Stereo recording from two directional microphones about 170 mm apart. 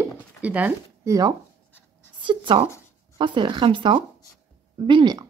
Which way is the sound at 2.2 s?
30° right (ahead or behind).